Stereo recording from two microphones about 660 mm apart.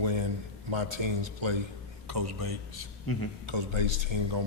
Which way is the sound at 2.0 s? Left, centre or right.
Right.